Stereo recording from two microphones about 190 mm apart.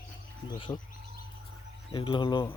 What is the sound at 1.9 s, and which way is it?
Speech, 25° left (ahead or behind).